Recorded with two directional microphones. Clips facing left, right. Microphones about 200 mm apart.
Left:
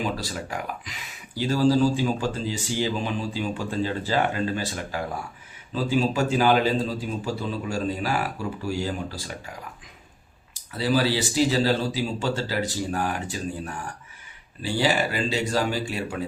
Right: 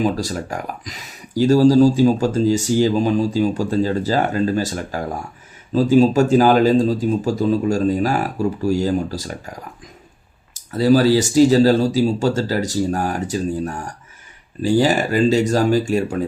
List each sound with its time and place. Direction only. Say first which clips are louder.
0.0 s speech: right 9 dB; 45° right (ahead or behind)